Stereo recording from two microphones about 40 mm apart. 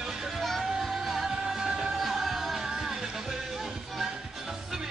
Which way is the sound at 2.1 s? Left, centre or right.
Centre.